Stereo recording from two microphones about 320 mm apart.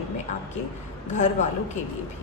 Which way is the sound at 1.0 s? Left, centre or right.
Left.